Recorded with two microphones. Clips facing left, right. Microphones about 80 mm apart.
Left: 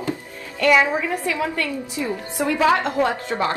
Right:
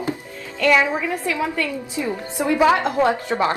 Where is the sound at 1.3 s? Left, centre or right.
Centre.